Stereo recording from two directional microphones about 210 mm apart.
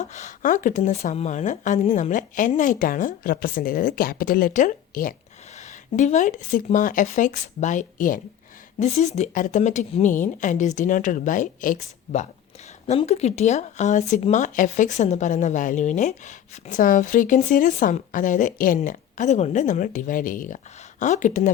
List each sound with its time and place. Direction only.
0.0 s speech: 35° left (ahead or behind)